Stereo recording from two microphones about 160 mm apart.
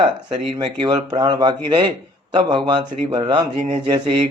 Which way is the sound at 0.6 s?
30° right (ahead or behind).